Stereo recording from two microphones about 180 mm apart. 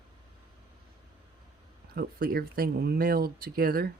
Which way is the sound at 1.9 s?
55° right (ahead or behind).